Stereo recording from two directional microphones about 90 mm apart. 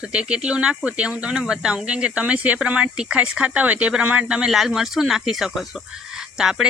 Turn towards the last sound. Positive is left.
turn(degrees=-5)  # may be behind; listen again after turning